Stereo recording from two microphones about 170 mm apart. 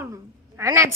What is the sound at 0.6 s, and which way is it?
Speech, 15° right (ahead or behind).